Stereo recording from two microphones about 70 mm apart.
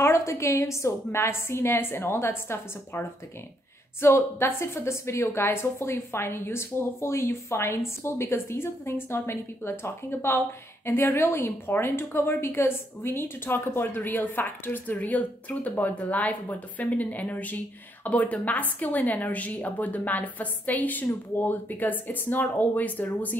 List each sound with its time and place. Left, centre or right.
0.0 s a woman's voice: left